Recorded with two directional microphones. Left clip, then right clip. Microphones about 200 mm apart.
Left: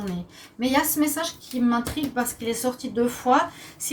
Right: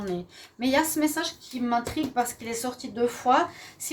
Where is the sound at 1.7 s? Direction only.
45° right (ahead or behind).